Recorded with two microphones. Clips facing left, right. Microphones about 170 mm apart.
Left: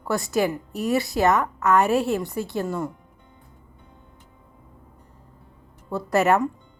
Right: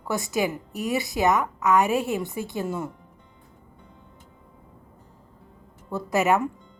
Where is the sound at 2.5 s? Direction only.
5° right (ahead or behind).